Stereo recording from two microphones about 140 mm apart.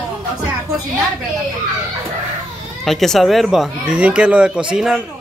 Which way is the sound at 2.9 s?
Centre (ahead or behind).